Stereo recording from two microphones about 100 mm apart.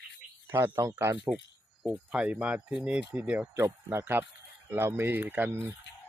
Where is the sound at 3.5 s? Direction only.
25° right (ahead or behind).